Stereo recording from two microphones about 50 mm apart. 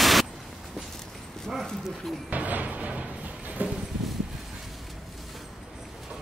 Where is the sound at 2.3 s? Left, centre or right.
Right.